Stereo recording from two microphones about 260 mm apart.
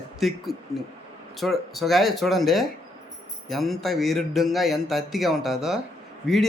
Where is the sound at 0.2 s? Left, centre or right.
Centre.